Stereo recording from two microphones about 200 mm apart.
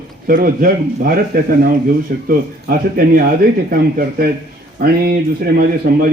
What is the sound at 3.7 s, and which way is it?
Speech, 45° right (ahead or behind).